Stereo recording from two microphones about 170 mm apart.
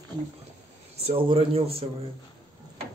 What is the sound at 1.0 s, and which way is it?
Speech, 35° right (ahead or behind).